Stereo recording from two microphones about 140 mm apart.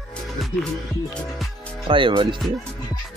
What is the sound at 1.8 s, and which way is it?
Speech, 35° right (ahead or behind).